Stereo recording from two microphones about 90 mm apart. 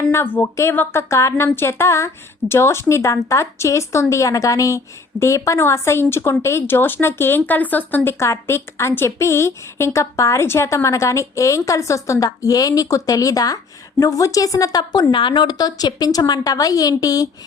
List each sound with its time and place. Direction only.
0.1 s a woman's voice: 25° left (ahead or behind)
8.2 s a woman's voice: 30° left (ahead or behind)